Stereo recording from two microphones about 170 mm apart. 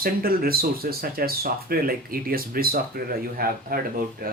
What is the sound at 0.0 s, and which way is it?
Speech, 60° right (ahead or behind).